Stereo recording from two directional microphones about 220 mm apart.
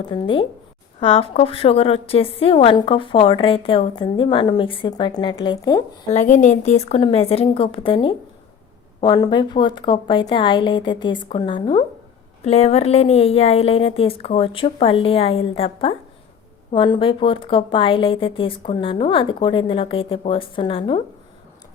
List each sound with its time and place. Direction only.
0.1 s a woman's voice: 25° left (ahead or behind)
6.1 s a woman's voice: 30° left (ahead or behind)